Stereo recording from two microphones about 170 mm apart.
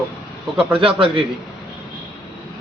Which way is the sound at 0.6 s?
5° right (ahead or behind).